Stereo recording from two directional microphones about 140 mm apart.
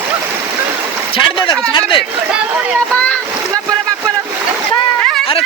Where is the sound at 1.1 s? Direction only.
35° left (ahead or behind).